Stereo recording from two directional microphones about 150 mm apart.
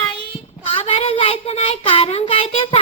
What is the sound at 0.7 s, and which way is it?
Speech, 40° left (ahead or behind).